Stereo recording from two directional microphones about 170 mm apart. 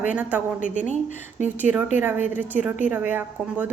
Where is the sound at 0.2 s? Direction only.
10° right (ahead or behind).